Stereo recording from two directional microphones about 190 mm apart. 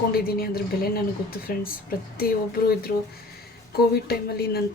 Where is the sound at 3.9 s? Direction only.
55° left (ahead or behind).